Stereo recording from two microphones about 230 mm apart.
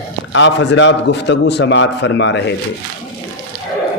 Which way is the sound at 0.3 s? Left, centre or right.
Left.